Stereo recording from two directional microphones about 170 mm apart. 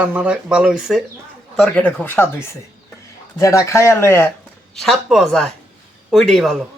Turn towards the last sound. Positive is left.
turn(degrees=0)  # may be behind; listen again after turning